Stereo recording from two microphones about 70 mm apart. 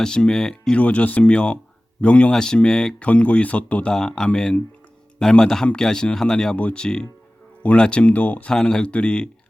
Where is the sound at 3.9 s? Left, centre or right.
Centre.